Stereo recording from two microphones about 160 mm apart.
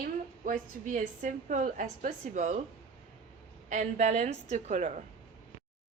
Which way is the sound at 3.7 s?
50° right (ahead or behind).